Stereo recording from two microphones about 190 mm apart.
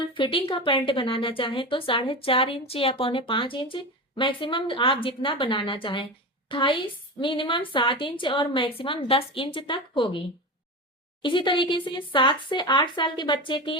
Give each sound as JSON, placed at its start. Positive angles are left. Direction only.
{"t": 0.1, "sound": "speech", "side_deg": 25}